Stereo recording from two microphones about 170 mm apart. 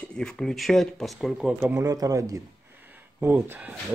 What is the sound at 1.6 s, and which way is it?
Speech, 20° right (ahead or behind).